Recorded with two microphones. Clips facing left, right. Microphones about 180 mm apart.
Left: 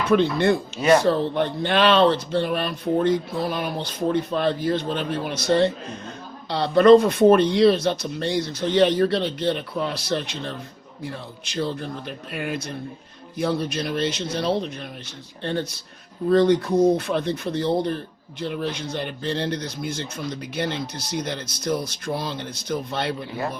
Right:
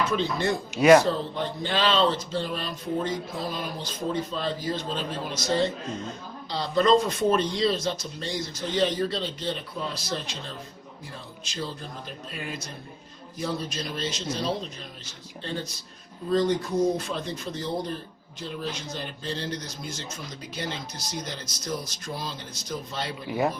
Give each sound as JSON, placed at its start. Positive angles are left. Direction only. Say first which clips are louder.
{"t": 0.1, "sound": "speech", "louder": "left 8 dB", "side_deg": 60}
{"t": 0.8, "sound": "speech", "louder": "right 3 dB", "side_deg": -10}
{"t": 1.0, "sound": "speech", "louder": "left 7 dB", "side_deg": 60}